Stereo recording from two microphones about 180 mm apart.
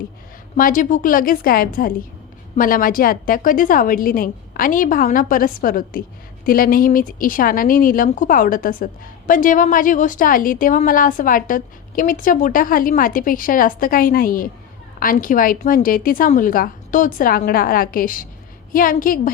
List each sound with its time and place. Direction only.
0.5 s speech: 50° left (ahead or behind)